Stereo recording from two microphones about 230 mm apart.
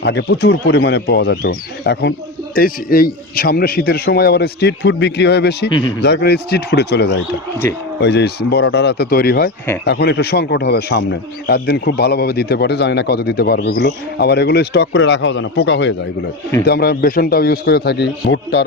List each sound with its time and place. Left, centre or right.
0.0 s a man's voice: left